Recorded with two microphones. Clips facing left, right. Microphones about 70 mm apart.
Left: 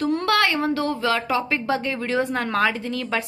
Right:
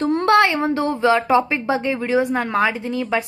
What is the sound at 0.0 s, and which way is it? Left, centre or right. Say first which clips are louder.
Speech: right 5 dB; right.